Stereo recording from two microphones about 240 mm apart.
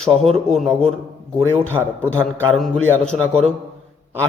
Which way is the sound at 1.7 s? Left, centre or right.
Right.